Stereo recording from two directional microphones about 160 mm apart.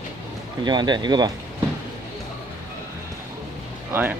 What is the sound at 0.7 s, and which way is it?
Speech, 25° right (ahead or behind).